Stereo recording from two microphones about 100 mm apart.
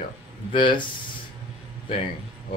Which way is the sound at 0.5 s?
55° left (ahead or behind).